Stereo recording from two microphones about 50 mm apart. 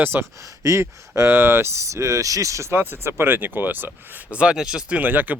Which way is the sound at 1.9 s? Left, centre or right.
Right.